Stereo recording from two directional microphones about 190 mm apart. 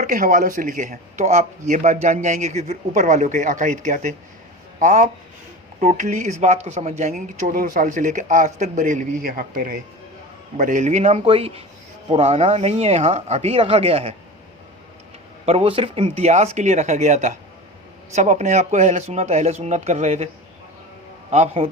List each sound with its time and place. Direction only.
0.0 s speech: 45° right (ahead or behind)
15.4 s a man's voice: 30° right (ahead or behind)